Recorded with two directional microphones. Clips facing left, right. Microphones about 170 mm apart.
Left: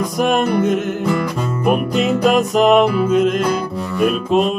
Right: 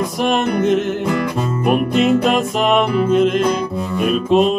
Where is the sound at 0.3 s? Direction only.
50° left (ahead or behind).